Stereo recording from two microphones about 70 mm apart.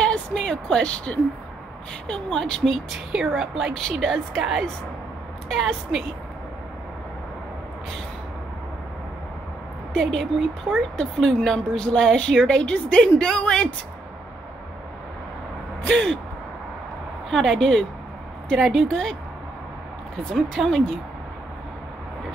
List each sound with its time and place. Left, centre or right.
0.0 s speech: centre
3.1 s a woman's voice: centre
9.9 s speech: centre
15.9 s speech: centre
17.3 s speech: centre
20.3 s speech: centre